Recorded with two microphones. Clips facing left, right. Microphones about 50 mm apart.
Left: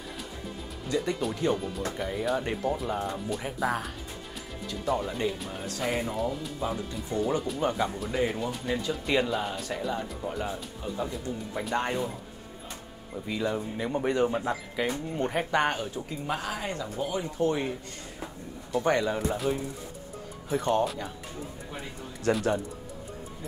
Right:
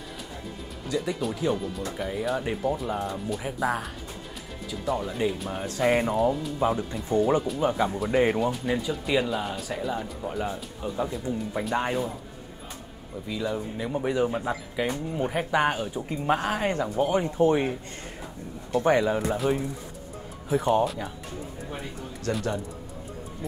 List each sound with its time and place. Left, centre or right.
0.8 s speech: centre
5.5 s speech: right
7.4 s speech: centre
13.3 s speech: centre
16.1 s speech: right
17.4 s speech: right
18.8 s speech: centre